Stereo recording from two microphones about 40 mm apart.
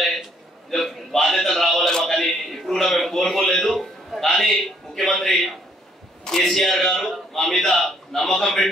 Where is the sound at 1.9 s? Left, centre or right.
Centre.